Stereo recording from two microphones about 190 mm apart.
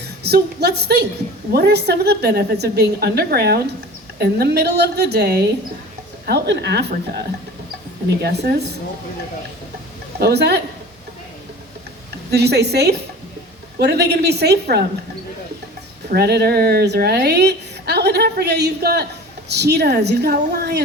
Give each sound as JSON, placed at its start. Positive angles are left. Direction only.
{"t": 0.2, "sound": "a woman's voice", "side_deg": -60}
{"t": 8.2, "sound": "a woman's voice", "side_deg": -60}
{"t": 10.2, "sound": "a woman's voice", "side_deg": -60}
{"t": 12.3, "sound": "a woman's voice", "side_deg": -60}
{"t": 16.1, "sound": "a woman's voice", "side_deg": -55}